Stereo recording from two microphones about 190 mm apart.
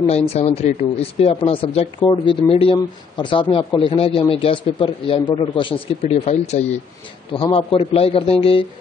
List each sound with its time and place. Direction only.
0.0 s speech: 35° left (ahead or behind)